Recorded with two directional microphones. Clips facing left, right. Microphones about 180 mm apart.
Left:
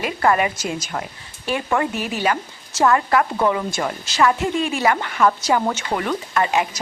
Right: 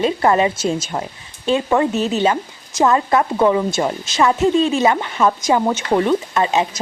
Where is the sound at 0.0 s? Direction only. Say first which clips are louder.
Right 4 dB; 25° right (ahead or behind).